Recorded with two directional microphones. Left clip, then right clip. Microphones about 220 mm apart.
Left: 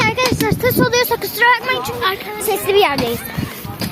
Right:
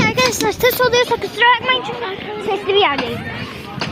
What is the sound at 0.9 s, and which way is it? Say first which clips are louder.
A child's voice: right 1 dB; 10° left (ahead or behind).